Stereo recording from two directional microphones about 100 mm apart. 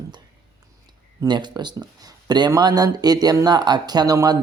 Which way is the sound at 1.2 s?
50° right (ahead or behind).